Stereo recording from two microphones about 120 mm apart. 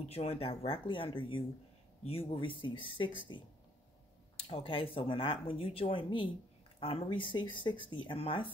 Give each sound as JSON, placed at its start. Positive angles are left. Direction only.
{"t": 0.1, "sound": "speech", "side_deg": 60}
{"t": 4.4, "sound": "speech", "side_deg": 55}